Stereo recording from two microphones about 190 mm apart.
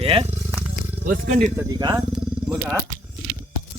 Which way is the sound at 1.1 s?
40° right (ahead or behind).